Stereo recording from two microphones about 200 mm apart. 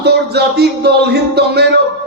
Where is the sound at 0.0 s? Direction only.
55° right (ahead or behind).